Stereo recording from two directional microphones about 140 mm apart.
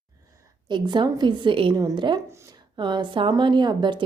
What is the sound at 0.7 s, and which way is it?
Speech, 35° right (ahead or behind).